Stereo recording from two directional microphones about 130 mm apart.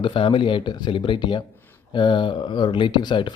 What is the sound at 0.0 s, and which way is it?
Speech, 40° left (ahead or behind).